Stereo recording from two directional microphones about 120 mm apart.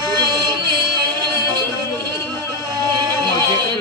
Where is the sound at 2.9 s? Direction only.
35° right (ahead or behind).